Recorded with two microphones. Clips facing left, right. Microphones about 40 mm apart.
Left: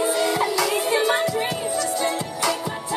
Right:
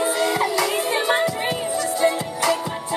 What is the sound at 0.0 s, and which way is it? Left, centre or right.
Music, centre.